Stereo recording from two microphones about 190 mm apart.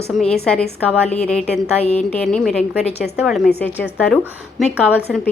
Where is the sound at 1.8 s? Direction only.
35° left (ahead or behind).